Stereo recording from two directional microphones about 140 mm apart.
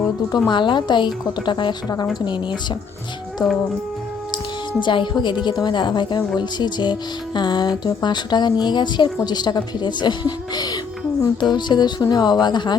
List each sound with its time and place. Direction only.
0.4 s speech: 35° left (ahead or behind)
4.8 s speech: 35° left (ahead or behind)